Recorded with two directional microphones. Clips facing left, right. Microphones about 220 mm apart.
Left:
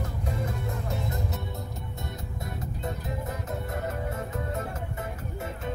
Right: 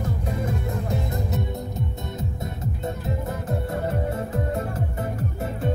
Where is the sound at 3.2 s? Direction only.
30° right (ahead or behind).